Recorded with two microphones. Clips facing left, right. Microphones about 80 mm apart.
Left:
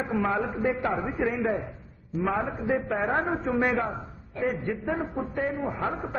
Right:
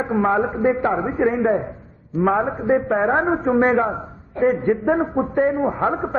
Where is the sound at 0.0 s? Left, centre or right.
Right.